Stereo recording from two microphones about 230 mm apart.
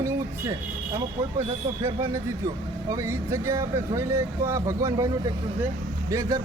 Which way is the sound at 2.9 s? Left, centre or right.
Centre.